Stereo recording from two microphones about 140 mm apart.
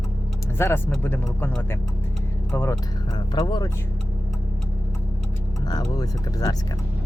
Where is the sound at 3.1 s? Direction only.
30° left (ahead or behind).